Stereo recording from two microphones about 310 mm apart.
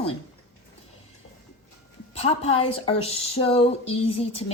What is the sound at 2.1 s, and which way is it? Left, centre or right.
Speech, centre.